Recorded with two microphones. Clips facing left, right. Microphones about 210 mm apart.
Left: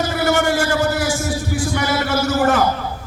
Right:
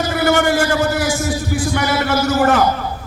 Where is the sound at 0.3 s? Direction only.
60° right (ahead or behind).